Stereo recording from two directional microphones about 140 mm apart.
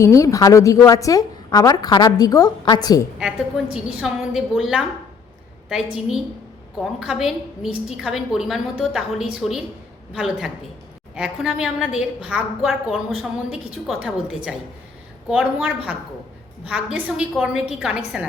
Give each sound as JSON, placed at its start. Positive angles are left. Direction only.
{"t": 0.0, "sound": "a woman's voice", "side_deg": 20}
{"t": 3.2, "sound": "a woman's voice", "side_deg": -5}